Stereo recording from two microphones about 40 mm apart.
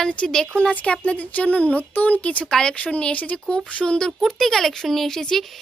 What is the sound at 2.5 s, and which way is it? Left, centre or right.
Speech, centre.